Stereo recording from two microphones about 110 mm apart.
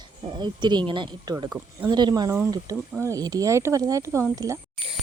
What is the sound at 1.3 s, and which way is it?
Speech, 35° right (ahead or behind).